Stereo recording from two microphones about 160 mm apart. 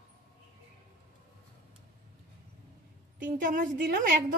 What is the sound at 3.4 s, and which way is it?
Speech, 60° right (ahead or behind).